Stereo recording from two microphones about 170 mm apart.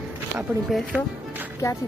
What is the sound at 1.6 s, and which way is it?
Speech, 15° left (ahead or behind).